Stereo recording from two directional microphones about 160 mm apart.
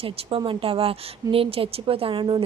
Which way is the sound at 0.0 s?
35° right (ahead or behind).